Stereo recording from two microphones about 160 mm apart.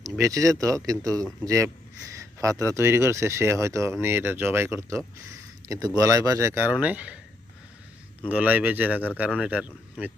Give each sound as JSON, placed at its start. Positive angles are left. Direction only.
{"t": 0.0, "sound": "speech", "side_deg": -20}
{"t": 8.3, "sound": "speech", "side_deg": -10}